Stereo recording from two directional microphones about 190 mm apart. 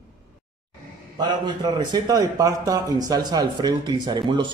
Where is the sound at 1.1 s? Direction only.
20° right (ahead or behind).